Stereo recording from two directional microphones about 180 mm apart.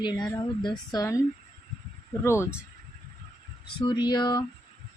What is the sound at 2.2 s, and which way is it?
Speech, 15° left (ahead or behind).